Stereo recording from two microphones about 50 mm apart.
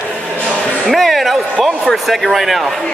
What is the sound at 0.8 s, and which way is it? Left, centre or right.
Music, centre.